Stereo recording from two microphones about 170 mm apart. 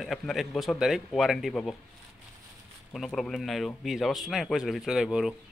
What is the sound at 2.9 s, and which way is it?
Speech, centre (ahead or behind).